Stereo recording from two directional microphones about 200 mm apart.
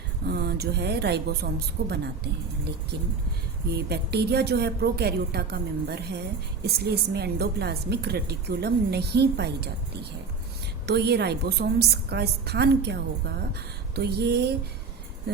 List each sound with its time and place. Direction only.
0.3 s a woman's voice: 55° right (ahead or behind)
3.7 s a woman's voice: 55° right (ahead or behind)
10.8 s a woman's voice: 55° right (ahead or behind)